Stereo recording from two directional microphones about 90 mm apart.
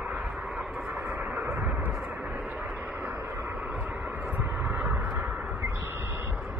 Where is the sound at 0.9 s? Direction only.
20° right (ahead or behind).